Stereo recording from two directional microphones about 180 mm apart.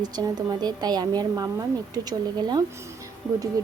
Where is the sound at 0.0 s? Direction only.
25° right (ahead or behind).